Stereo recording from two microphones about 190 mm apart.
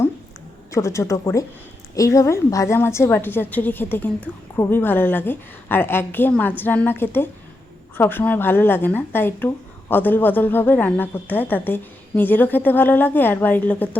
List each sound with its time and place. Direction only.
0.7 s speech: 15° left (ahead or behind)